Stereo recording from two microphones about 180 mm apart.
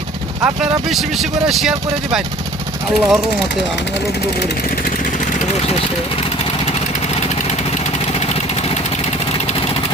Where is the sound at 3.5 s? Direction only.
75° left (ahead or behind).